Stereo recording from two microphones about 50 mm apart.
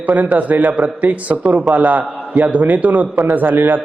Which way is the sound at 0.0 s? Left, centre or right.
Right.